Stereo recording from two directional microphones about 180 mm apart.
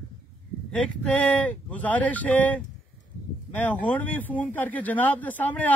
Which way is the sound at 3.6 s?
10° left (ahead or behind).